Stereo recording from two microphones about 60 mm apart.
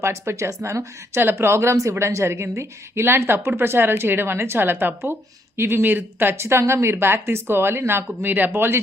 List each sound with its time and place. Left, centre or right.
0.0 s a woman's voice: right
1.2 s a woman's voice: right